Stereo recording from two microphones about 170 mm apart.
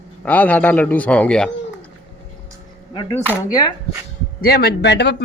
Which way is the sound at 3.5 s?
25° left (ahead or behind).